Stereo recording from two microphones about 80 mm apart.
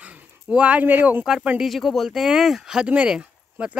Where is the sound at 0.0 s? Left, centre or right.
Centre.